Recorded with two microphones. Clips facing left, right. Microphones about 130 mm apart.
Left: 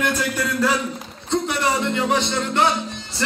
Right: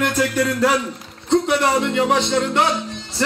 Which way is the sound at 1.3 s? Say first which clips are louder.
Right 5 dB; 85° right.